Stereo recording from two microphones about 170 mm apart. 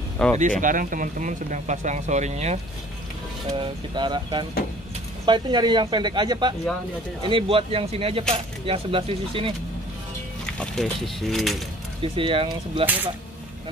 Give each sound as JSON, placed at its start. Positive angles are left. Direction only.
{"t": 0.4, "sound": "speech", "side_deg": -50}
{"t": 3.5, "sound": "speech", "side_deg": -25}
{"t": 10.6, "sound": "speech", "side_deg": 0}
{"t": 12.0, "sound": "speech", "side_deg": -30}
{"t": 12.8, "sound": "speech", "side_deg": -10}